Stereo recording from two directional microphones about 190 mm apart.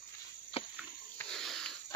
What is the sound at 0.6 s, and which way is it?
Cricket, 30° left (ahead or behind).